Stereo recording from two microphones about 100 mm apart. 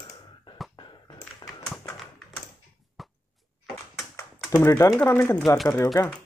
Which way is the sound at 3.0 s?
Centre (ahead or behind).